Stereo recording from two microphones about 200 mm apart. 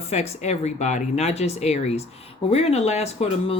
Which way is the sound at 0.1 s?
35° left (ahead or behind).